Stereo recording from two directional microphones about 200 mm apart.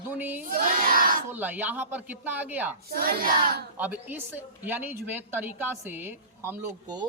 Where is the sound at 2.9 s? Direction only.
50° right (ahead or behind).